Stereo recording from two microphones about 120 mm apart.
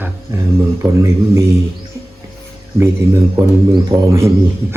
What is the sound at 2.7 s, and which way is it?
Speech, 20° right (ahead or behind).